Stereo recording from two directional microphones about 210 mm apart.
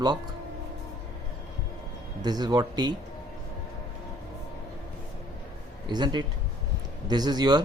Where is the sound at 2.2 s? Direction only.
20° right (ahead or behind).